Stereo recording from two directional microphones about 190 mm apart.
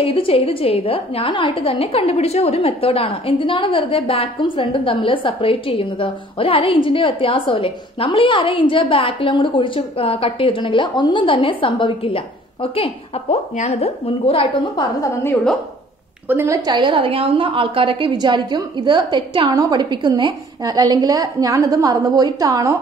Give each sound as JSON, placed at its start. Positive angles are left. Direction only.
{"t": 0.0, "sound": "a woman's voice", "side_deg": 30}
{"t": 16.3, "sound": "a woman's voice", "side_deg": -15}